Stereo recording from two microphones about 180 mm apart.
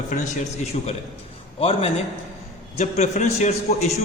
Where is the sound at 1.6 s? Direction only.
35° left (ahead or behind).